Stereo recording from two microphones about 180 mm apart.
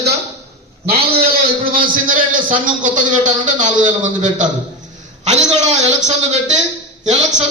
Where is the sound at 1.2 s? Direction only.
55° right (ahead or behind).